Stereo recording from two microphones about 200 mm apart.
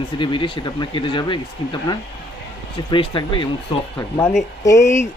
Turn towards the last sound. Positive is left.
turn(degrees=15)  # may be behind; listen again after turning